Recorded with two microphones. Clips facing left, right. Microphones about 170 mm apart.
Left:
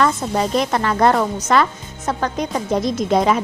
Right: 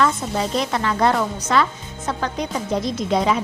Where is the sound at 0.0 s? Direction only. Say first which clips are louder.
Left 2 dB; 45° left (ahead or behind).